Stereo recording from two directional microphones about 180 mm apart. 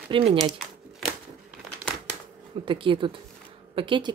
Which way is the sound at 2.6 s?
30° right (ahead or behind).